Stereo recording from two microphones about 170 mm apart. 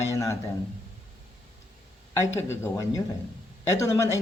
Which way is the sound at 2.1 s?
20° left (ahead or behind).